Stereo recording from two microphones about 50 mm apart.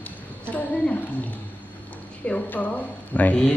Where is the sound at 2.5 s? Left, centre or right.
Left.